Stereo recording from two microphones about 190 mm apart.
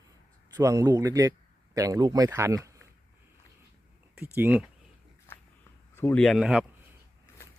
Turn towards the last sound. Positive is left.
turn(degrees=-5)  # may be behind; listen again after turning